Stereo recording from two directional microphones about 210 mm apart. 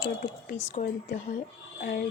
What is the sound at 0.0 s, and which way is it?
A woman's voice, 45° left (ahead or behind).